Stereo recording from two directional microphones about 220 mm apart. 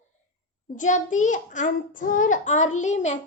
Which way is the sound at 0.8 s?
35° left (ahead or behind).